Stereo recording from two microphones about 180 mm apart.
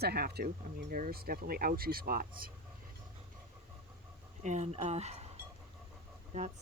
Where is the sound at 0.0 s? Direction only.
60° right (ahead or behind).